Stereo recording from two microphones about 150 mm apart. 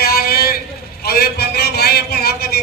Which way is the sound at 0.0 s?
90° left.